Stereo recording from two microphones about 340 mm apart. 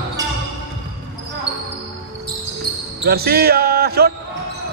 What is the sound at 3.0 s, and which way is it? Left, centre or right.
Basketball bounce, right.